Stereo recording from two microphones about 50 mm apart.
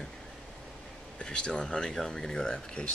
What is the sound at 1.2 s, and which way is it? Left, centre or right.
Speech, centre.